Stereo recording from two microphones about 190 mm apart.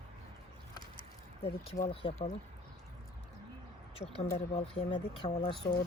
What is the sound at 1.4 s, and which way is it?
Speech, 30° left (ahead or behind).